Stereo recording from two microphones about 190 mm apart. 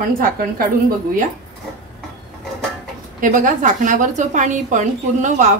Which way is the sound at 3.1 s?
45° right (ahead or behind).